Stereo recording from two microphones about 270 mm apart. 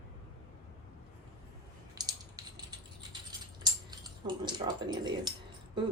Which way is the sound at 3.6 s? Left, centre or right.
Centre.